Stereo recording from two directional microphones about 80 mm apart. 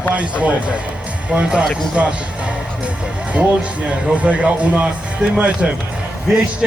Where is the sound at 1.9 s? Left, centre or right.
Centre.